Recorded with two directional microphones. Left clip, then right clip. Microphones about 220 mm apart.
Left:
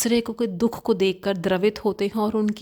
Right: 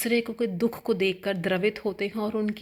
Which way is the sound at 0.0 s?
50° left (ahead or behind).